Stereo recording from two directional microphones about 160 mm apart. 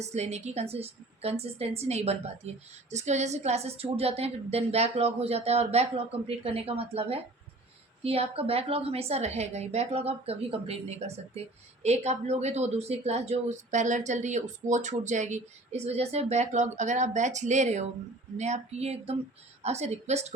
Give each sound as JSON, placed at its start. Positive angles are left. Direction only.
{"t": 0.0, "sound": "a woman's voice", "side_deg": -45}